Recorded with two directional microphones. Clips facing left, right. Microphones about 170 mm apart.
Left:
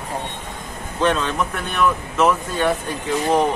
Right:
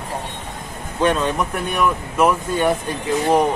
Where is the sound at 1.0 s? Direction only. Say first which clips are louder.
Right 1 dB; 10° right (ahead or behind).